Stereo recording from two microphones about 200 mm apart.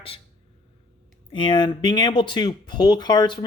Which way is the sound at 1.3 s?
25° left (ahead or behind).